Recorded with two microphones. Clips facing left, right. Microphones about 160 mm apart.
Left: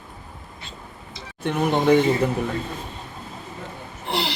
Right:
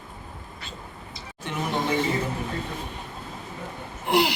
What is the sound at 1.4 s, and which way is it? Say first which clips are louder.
Speech: left 8 dB; 60° left (ahead or behind).